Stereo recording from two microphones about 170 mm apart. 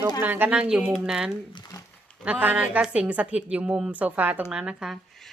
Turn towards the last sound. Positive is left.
turn(degrees=-5)  # may be behind; listen again after turning